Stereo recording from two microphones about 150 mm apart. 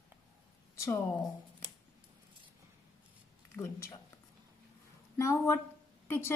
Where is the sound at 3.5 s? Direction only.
20° left (ahead or behind).